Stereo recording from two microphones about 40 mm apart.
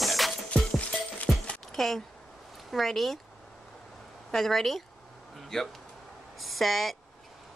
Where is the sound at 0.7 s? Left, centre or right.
Left.